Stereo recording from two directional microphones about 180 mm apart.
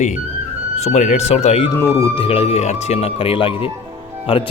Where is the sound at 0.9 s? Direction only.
40° left (ahead or behind).